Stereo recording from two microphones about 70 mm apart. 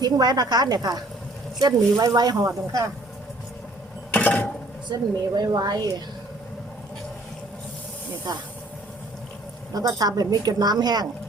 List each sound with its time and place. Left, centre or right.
0.0 s a woman's voice: right
4.1 s a sound: left
4.9 s a woman's voice: right
5.5 s a woman's voice: right
8.3 s a woman's voice: right
9.7 s a woman's voice: right